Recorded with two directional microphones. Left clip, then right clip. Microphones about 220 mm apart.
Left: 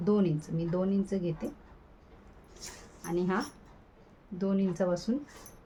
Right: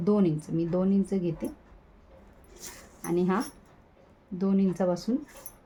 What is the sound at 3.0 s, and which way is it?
A woman's voice, 35° right (ahead or behind).